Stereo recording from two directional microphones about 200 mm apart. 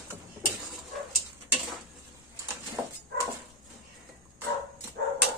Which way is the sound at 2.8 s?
5° right (ahead or behind).